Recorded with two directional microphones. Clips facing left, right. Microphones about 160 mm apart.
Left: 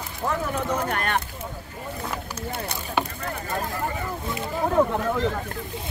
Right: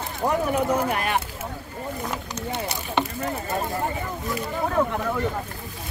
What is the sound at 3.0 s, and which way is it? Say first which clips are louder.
Speech: right 1 dB; 10° left (ahead or behind).